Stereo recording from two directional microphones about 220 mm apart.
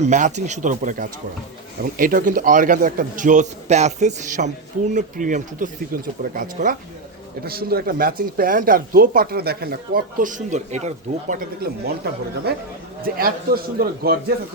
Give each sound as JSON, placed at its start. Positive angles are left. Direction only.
{"t": 0.0, "sound": "a man's voice", "side_deg": -30}